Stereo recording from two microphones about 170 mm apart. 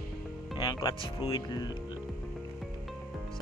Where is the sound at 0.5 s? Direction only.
25° left (ahead or behind).